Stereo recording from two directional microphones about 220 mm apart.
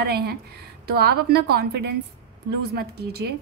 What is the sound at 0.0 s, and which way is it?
A woman's voice, 45° right (ahead or behind).